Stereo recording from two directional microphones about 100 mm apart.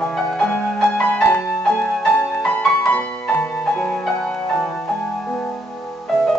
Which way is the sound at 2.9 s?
20° left (ahead or behind).